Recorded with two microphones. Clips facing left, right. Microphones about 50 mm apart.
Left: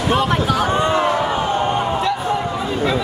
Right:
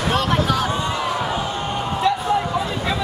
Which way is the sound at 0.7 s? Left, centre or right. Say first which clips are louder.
Left 6 dB; left.